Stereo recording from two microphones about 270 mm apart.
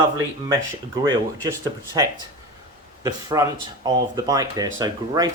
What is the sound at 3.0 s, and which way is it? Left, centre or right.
Speech, centre.